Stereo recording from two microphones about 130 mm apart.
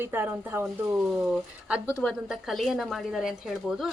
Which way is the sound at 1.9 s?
10° left (ahead or behind).